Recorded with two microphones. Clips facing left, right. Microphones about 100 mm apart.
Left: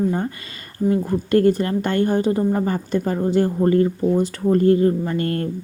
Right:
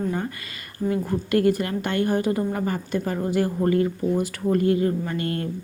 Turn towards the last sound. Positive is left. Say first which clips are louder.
# left 4 dB
turn(degrees=40)  # may be behind; listen again after turning